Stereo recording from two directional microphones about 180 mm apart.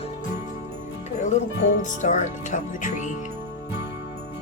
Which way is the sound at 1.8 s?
45° left (ahead or behind).